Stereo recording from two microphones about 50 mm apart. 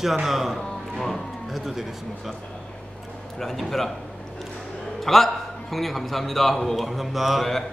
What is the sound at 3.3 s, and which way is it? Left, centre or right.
Speech, centre.